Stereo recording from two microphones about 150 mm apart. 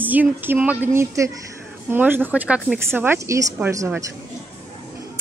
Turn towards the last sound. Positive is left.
turn(degrees=-20)  # may be behind; listen again after turning